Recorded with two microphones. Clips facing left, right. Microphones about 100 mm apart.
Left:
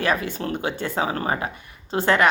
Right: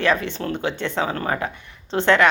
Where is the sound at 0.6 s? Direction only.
45° left (ahead or behind).